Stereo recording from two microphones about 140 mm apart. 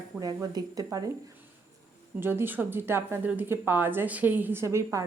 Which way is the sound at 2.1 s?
15° right (ahead or behind).